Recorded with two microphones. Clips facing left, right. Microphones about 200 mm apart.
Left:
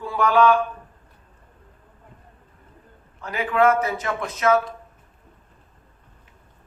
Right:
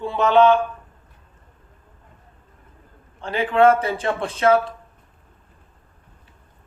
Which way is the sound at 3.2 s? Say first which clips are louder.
Right 3 dB; 30° right (ahead or behind).